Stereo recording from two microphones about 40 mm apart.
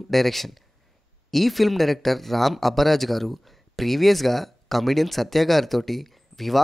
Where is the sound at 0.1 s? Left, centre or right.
Centre.